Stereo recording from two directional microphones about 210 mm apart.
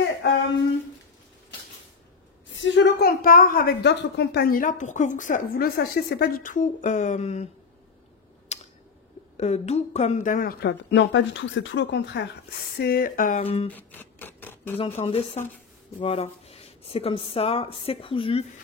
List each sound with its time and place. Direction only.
2.5 s a woman's voice: 60° left (ahead or behind); by 7.4 s 30° left (ahead or behind)
8.5 s a sound: 30° left (ahead or behind)
9.4 s a woman's voice: 30° left (ahead or behind)
13.4 s speech: 25° left (ahead or behind)
13.7 s a sound: 10° left (ahead or behind)
14.8 s speech: 25° left (ahead or behind)